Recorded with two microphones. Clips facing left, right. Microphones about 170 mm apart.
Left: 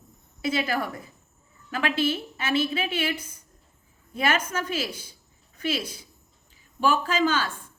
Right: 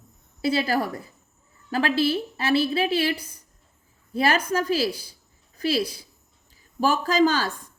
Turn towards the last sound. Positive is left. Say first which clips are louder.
# right 4 dB
turn(degrees=-40)  # may be behind; listen again after turning